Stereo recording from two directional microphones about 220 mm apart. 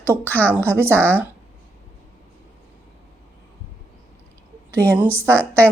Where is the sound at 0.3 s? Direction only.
5° left (ahead or behind).